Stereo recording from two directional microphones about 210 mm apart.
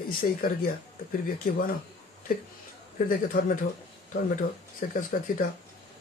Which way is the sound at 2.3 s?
45° left (ahead or behind).